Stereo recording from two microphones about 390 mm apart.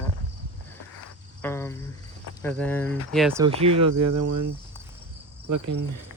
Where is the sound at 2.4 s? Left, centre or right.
Centre.